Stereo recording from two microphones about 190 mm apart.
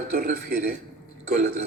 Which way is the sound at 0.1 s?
55° right (ahead or behind).